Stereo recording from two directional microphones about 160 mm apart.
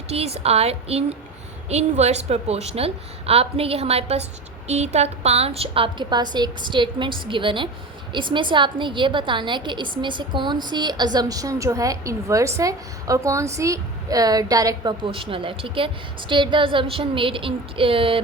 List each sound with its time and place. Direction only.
0.1 s a woman's voice: 40° right (ahead or behind); by 14.9 s 20° right (ahead or behind)
15.0 s a woman's voice: 35° right (ahead or behind)